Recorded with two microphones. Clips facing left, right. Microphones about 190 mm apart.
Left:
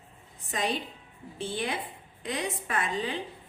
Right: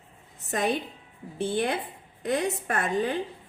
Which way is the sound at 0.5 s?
55° right (ahead or behind).